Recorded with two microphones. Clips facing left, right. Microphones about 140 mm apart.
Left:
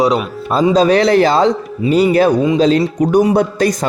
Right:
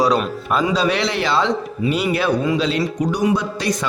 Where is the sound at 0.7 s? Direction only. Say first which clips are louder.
Left 9 dB; 40° left (ahead or behind).